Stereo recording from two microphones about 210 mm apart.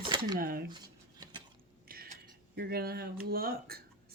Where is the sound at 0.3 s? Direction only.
45° right (ahead or behind).